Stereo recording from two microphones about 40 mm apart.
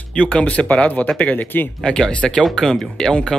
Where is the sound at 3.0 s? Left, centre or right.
Left.